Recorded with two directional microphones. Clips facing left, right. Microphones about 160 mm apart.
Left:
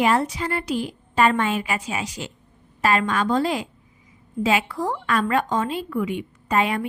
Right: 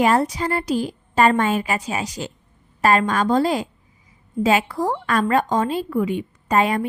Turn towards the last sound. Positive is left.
turn(degrees=-40)  # may be behind; listen again after turning